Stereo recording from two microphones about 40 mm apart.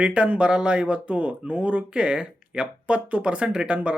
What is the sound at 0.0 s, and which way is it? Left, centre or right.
Speech, right.